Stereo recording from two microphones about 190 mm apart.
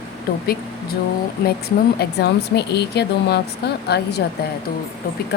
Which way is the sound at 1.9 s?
60° left (ahead or behind).